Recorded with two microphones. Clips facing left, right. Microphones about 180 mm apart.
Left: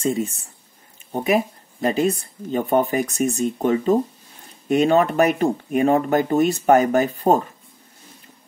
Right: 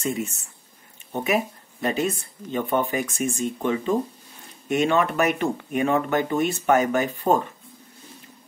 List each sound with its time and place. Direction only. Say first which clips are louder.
0.0 s speech: left 5 dB; 30° left (ahead or behind)